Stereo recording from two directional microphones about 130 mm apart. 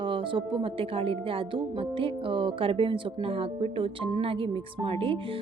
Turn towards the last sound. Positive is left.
turn(degrees=-45)  # may be behind; listen again after turning